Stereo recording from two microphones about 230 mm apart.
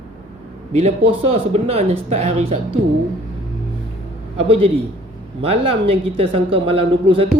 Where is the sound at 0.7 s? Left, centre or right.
Right.